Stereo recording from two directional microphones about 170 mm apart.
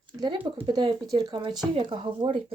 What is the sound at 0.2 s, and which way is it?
Speech, 30° right (ahead or behind).